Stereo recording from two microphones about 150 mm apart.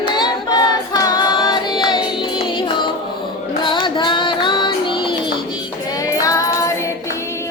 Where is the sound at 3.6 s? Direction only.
35° left (ahead or behind).